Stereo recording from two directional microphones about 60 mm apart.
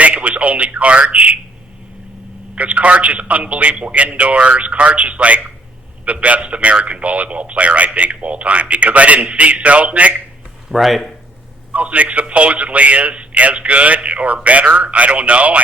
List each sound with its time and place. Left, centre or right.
0.0 s a sound: right
2.6 s a man's voice: right
10.7 s speech: centre
11.7 s a man's voice: right